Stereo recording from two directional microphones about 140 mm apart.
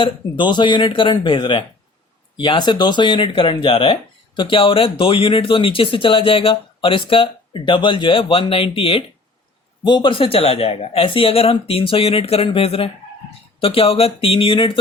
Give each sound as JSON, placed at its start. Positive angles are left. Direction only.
{"t": 0.0, "sound": "speech", "side_deg": 35}